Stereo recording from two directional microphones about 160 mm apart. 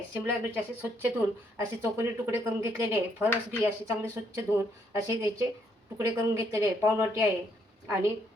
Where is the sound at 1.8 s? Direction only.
15° right (ahead or behind).